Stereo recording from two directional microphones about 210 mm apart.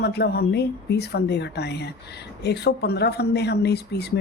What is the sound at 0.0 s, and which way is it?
A woman's voice, 50° left (ahead or behind).